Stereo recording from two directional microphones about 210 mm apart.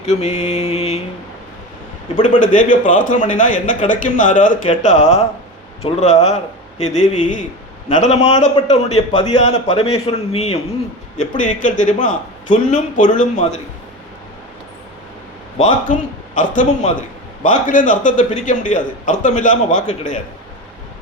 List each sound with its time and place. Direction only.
0.0 s a man's voice: 30° left (ahead or behind)
2.2 s a man's voice: 35° left (ahead or behind)
9.0 s a man's voice: 20° left (ahead or behind)
9.4 s a man's voice: 30° left (ahead or behind)
15.5 s a man's voice: 35° left (ahead or behind)